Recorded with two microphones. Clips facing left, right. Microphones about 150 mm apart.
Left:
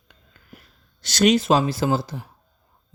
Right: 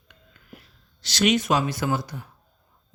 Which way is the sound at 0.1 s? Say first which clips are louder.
Right 1 dB; 45° left (ahead or behind).